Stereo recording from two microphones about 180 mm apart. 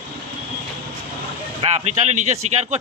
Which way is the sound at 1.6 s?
40° right (ahead or behind).